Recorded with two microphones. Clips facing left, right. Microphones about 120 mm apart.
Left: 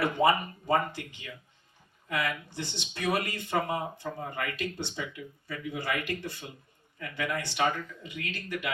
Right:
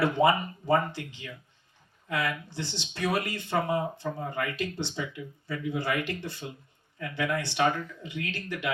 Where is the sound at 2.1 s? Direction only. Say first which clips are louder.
Right 1 dB; 25° right (ahead or behind).